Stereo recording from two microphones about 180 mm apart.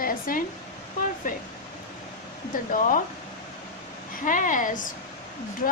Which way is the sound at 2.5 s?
45° left (ahead or behind).